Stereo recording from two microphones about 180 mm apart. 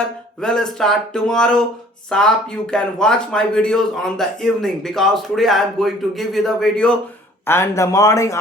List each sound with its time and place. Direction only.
0.4 s a man's voice: 5° left (ahead or behind)
7.4 s speech: 15° left (ahead or behind)